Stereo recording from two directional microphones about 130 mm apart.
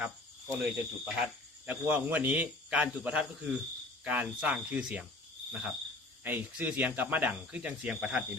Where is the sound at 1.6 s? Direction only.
15° right (ahead or behind).